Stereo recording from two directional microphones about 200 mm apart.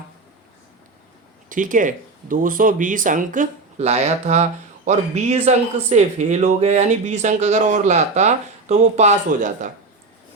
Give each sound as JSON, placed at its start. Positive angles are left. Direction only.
{"t": 1.5, "sound": "a man's voice", "side_deg": -40}